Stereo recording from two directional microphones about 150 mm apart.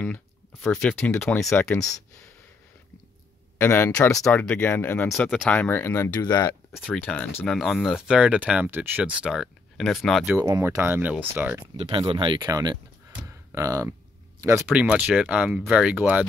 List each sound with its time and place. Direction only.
0.9 s speech: 5° left (ahead or behind)
1.6 s speech: 15° left (ahead or behind)
3.5 s speech: 15° left (ahead or behind)
5.1 s speech: centre (ahead or behind)
6.2 s speech: 25° left (ahead or behind)
6.7 s speech: 5° left (ahead or behind)
10.3 s speech: 15° right (ahead or behind)
11.7 s speech: 35° right (ahead or behind); by 16.3 s 10° right (ahead or behind)